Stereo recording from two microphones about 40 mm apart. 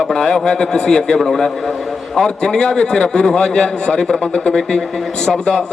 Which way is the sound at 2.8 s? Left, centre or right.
Left.